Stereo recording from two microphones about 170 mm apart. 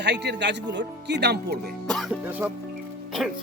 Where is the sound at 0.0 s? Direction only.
90° right.